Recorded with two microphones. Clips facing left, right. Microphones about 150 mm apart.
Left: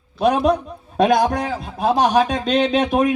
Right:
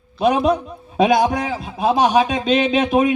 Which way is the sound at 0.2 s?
5° right (ahead or behind).